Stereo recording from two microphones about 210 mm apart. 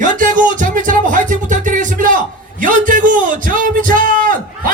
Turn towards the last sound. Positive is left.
turn(degrees=-40)  # may be behind; listen again after turning